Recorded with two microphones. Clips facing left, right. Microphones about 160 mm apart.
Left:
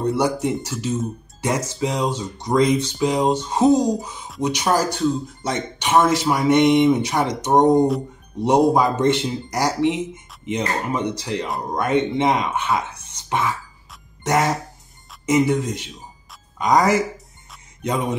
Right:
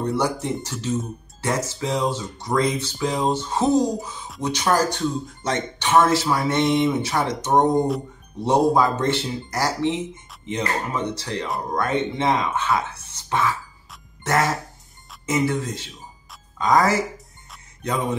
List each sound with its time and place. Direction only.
0.0 s speech: 15° left (ahead or behind)